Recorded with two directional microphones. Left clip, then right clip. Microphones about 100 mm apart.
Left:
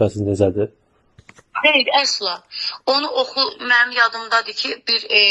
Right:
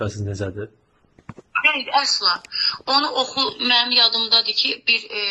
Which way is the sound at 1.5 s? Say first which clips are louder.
Left 2 dB; 65° left (ahead or behind).